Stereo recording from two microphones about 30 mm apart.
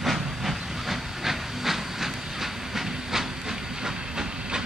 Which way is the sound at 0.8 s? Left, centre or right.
Centre.